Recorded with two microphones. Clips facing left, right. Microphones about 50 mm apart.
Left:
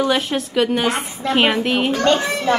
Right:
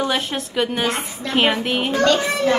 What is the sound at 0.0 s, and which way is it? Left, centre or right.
A woman's voice, centre.